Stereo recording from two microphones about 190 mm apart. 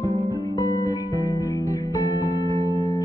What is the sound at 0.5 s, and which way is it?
Music, 20° left (ahead or behind).